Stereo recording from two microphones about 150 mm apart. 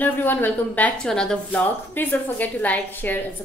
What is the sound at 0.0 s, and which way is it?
Speech, 10° left (ahead or behind).